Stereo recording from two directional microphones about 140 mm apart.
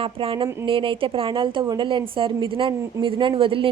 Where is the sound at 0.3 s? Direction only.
40° right (ahead or behind).